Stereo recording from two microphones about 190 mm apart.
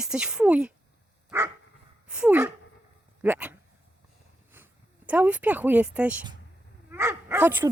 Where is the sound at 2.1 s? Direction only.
5° right (ahead or behind).